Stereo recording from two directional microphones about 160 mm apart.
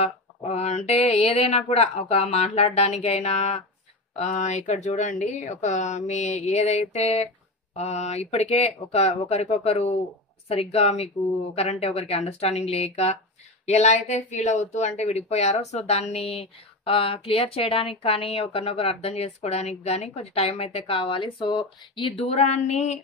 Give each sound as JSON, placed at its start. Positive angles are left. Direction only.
{"t": 0.0, "sound": "speech", "side_deg": 45}